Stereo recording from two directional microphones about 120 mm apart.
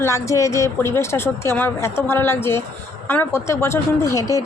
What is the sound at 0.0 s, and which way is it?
Speech, 25° left (ahead or behind).